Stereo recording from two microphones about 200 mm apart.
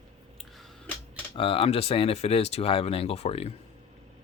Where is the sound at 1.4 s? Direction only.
25° left (ahead or behind).